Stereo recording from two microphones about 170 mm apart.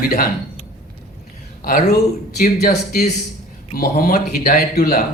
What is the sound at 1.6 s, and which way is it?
Speech, 60° left (ahead or behind).